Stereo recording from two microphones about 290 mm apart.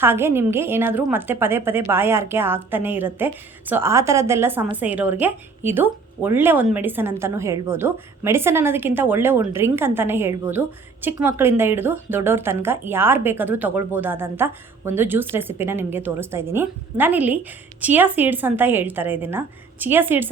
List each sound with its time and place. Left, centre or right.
0.0 s a woman's voice: centre